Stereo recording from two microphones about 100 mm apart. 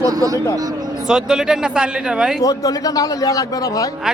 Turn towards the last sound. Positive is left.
turn(degrees=35)  # may be behind; listen again after turning